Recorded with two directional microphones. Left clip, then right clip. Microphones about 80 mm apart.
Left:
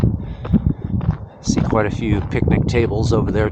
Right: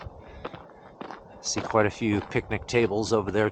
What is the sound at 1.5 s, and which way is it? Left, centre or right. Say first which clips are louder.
Speech: left 5 dB; centre.